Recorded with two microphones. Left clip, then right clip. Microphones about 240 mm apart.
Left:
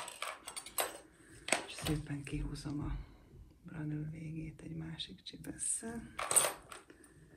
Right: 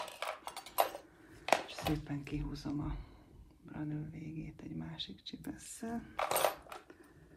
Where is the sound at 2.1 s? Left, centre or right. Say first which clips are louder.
Right 2 dB; right.